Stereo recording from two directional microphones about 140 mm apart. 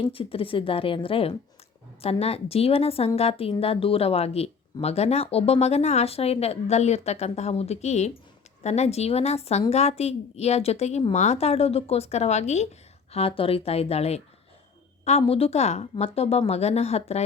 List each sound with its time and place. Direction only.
0.0 s a woman's voice: 40° left (ahead or behind)
13.1 s speech: 45° left (ahead or behind)